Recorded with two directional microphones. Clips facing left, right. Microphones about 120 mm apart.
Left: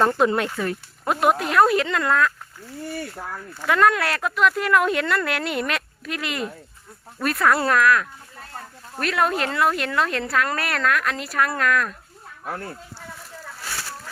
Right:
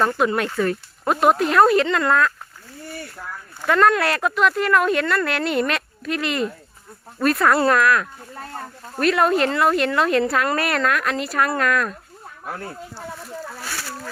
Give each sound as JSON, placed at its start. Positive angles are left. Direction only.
{"t": 0.0, "sound": "speech", "side_deg": 30}
{"t": 0.5, "sound": "speech", "side_deg": 10}
{"t": 3.7, "sound": "speech", "side_deg": 5}